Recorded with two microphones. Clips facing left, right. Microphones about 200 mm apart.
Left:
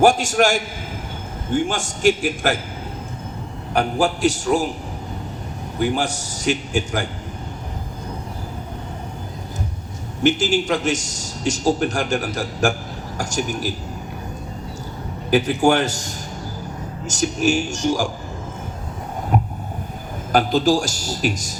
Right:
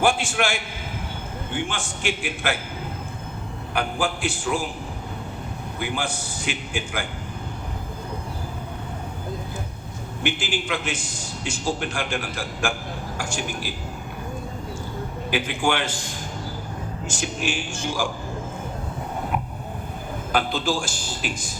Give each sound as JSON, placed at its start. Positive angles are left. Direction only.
{"t": 0.0, "sound": "a man's voice", "side_deg": 40}
{"t": 3.8, "sound": "a man's voice", "side_deg": 40}
{"t": 5.8, "sound": "a man's voice", "side_deg": 40}
{"t": 10.2, "sound": "a man's voice", "side_deg": 40}
{"t": 15.3, "sound": "a man's voice", "side_deg": 40}
{"t": 19.3, "sound": "a sound", "side_deg": 40}
{"t": 20.3, "sound": "a man's voice", "side_deg": 45}